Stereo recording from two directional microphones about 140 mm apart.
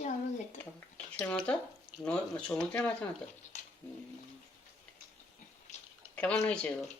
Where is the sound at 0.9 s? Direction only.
10° left (ahead or behind).